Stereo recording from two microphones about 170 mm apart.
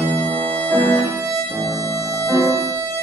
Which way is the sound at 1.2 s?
20° right (ahead or behind).